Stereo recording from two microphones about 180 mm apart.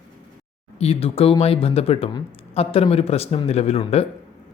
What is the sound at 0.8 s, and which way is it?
Speech, 35° left (ahead or behind).